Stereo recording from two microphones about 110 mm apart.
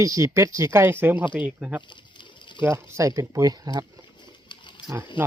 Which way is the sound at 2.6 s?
20° right (ahead or behind).